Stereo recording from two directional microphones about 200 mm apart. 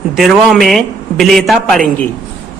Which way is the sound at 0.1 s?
Centre (ahead or behind).